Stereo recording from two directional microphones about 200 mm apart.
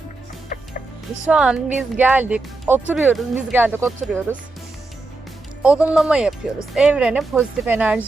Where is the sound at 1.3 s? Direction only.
5° right (ahead or behind).